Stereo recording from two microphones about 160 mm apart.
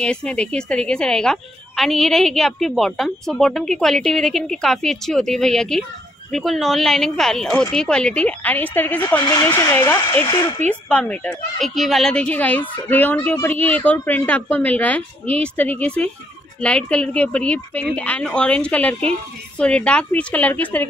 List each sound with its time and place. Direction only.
0.0 s a woman's voice: 5° left (ahead or behind)
9.2 s a woman's voice: 25° left (ahead or behind)